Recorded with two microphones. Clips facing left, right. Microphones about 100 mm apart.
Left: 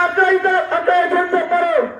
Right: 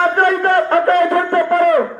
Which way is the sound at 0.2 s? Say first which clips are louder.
Right 1 dB; 60° right (ahead or behind).